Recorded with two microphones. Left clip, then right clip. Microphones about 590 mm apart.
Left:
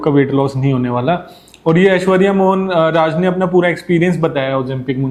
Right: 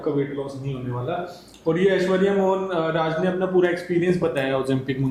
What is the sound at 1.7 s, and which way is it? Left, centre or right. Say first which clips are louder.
A man's voice: left 8 dB; left.